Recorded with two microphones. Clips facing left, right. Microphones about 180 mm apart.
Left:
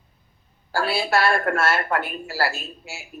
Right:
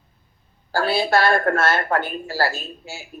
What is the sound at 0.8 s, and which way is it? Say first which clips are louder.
Speech: right 3 dB; 35° right (ahead or behind).